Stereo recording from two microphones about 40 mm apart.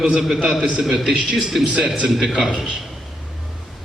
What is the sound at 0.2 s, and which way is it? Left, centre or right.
A man's voice, centre.